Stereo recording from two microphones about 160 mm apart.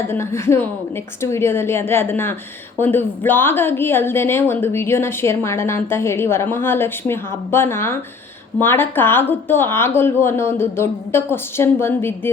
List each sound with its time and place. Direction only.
0.1 s a woman's voice: 15° left (ahead or behind)